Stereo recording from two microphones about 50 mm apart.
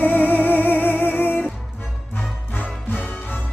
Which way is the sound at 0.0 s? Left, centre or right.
Left.